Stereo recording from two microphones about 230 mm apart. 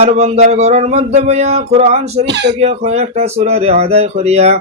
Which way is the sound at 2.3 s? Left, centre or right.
Right.